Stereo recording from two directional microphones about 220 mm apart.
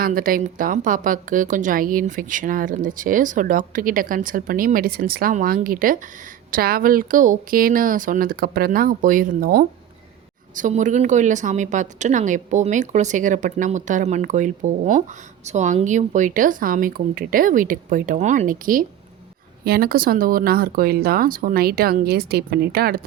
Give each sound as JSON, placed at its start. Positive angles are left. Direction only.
{"t": 0.0, "sound": "a woman's voice", "side_deg": -40}